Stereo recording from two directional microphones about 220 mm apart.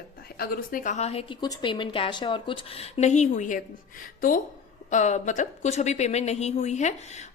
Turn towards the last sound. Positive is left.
turn(degrees=30)  # may be behind; listen again after turning